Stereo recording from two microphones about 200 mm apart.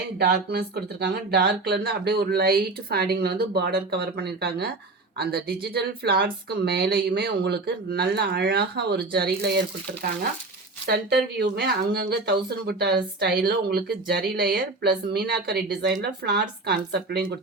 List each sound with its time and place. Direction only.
0.2 s speech: 55° right (ahead or behind)
10.8 s speech: 55° right (ahead or behind)